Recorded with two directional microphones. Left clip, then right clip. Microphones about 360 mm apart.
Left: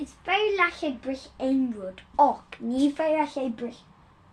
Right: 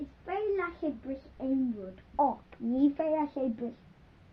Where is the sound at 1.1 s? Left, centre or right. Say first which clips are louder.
Left 5 dB; left.